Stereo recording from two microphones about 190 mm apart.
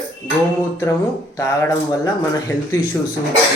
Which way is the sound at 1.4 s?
15° left (ahead or behind).